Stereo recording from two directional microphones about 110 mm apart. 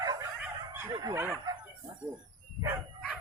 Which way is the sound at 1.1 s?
20° right (ahead or behind).